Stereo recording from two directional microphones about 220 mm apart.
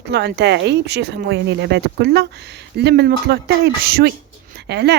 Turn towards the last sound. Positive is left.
turn(degrees=-50)  # may be behind; listen again after turning